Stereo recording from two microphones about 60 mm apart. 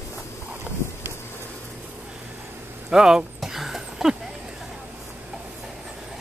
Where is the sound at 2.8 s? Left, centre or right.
Centre.